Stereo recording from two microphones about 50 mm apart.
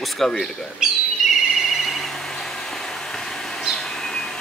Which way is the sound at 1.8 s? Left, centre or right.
Centre.